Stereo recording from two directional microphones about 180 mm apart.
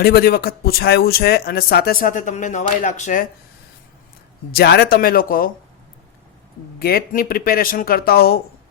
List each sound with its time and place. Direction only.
0.0 s speech: 60° left (ahead or behind)
4.5 s speech: 65° left (ahead or behind)
6.7 s speech: 55° left (ahead or behind)